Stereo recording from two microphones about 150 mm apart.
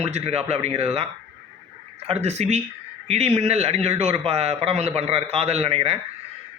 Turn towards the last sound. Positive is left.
turn(degrees=-45)  # may be behind; listen again after turning